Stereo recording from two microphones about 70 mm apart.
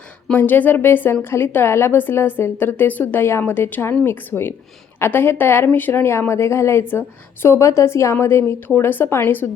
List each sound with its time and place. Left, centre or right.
0.3 s a woman's voice: left